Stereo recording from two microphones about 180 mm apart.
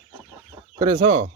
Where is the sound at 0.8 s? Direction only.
30° right (ahead or behind).